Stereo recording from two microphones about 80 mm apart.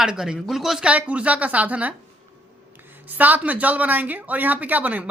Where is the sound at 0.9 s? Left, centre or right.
Centre.